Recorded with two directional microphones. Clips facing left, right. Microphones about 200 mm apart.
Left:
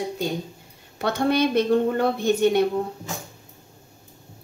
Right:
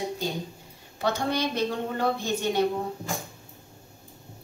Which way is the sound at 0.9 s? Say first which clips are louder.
Left 5 dB; 60° left (ahead or behind).